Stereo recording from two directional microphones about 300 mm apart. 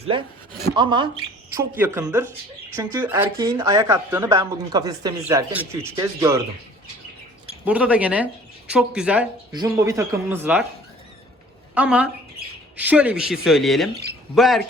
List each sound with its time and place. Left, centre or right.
0.8 s speech: centre
7.6 s speech: centre
11.7 s a woman's voice: centre